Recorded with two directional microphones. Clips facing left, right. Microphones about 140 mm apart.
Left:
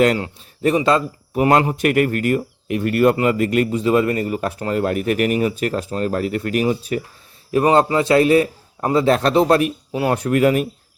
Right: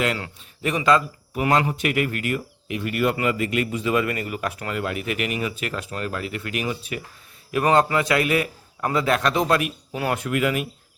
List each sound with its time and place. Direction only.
0.8 s speech: 30° left (ahead or behind)